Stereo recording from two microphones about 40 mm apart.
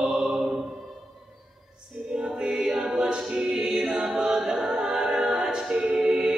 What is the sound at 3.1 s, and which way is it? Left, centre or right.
Choir, centre.